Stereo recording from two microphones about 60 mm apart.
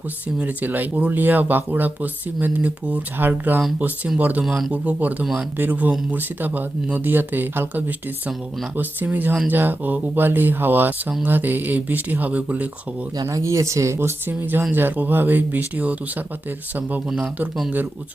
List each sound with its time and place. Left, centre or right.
0.3 s speech: right
4.4 s speech: centre
4.7 s speech: right
13.3 s speech: right